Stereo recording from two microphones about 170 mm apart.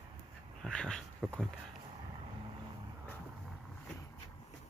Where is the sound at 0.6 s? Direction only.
5° left (ahead or behind).